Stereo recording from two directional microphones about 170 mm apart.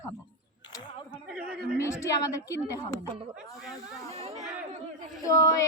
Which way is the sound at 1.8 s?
15° left (ahead or behind).